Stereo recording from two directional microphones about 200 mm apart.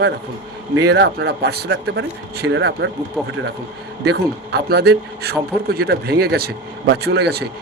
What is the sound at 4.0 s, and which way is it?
A man's voice, 55° right (ahead or behind).